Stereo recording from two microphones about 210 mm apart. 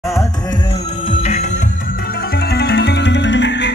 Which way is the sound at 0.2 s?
20° left (ahead or behind).